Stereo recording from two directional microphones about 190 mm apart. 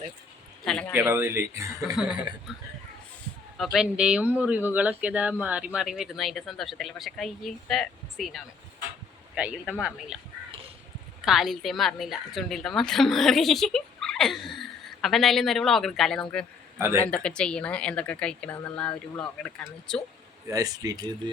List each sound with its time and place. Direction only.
0.6 s speech: centre (ahead or behind)
0.9 s speech: 10° right (ahead or behind)
1.8 s a woman's voice: centre (ahead or behind)
2.5 s a sound: centre (ahead or behind)
3.6 s a woman's voice: centre (ahead or behind)
11.3 s a woman's voice: centre (ahead or behind)
16.7 s a man's voice: 15° right (ahead or behind)
17.0 s a woman's voice: 5° left (ahead or behind)
18.9 s speech: 20° left (ahead or behind)
19.4 s a woman's voice: 5° left (ahead or behind)
20.5 s speech: 20° right (ahead or behind)